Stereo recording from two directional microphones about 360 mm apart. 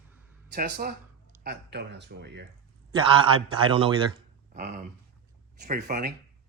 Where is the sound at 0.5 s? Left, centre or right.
Right.